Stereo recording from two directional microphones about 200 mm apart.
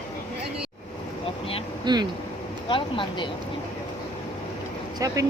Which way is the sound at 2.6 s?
25° left (ahead or behind).